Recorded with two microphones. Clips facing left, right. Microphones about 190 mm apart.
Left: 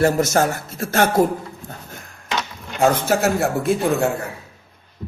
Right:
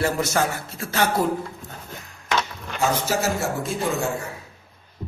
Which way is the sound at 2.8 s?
60° left (ahead or behind).